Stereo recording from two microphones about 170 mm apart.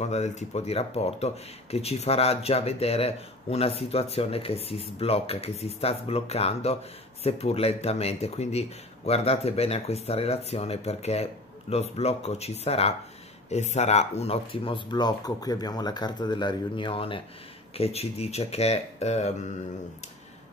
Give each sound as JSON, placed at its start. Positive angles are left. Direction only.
{"t": 0.0, "sound": "speech", "side_deg": 40}